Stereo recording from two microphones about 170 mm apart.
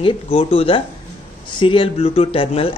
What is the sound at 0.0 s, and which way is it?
A man's voice, 35° left (ahead or behind).